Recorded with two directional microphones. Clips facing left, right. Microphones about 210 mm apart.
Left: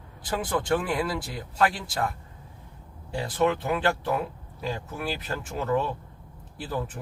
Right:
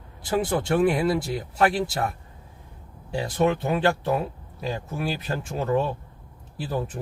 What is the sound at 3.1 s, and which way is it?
Speech, 25° right (ahead or behind).